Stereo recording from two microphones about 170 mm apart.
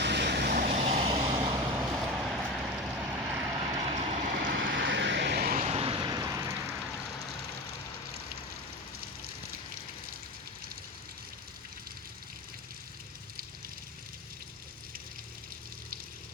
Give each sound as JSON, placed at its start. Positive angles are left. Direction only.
{"t": 0.0, "sound": "vehicle", "side_deg": -80}
{"t": 0.5, "sound": "vehicle", "side_deg": -50}
{"t": 0.8, "sound": "vehicle", "side_deg": -40}
{"t": 1.4, "sound": "vehicle", "side_deg": -10}
{"t": 3.7, "sound": "vehicle", "side_deg": -25}
{"t": 3.9, "sound": "vehicle", "side_deg": -40}
{"t": 4.3, "sound": "vehicle", "side_deg": -80}
{"t": 5.5, "sound": "vehicle", "side_deg": -35}